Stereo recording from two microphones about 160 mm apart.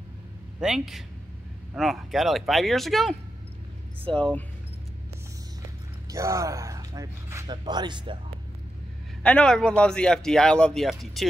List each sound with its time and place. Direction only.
0.6 s speech: 5° right (ahead or behind)
6.1 s speech: 20° right (ahead or behind)
9.2 s speech: 5° left (ahead or behind)